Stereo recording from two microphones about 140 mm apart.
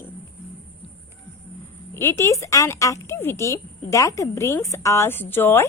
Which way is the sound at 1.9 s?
20° left (ahead or behind).